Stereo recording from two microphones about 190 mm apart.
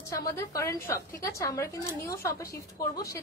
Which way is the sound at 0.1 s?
20° left (ahead or behind).